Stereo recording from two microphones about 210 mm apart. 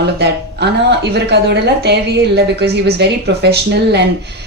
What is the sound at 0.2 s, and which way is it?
Speech, 55° right (ahead or behind).